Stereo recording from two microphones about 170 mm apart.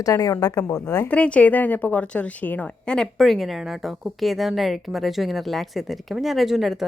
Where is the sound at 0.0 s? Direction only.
20° left (ahead or behind).